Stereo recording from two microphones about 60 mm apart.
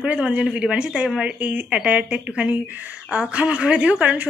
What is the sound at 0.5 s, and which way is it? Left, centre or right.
A woman's voice, centre.